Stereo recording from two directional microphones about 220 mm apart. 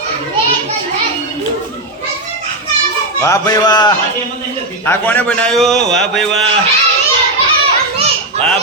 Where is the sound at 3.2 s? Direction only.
15° left (ahead or behind).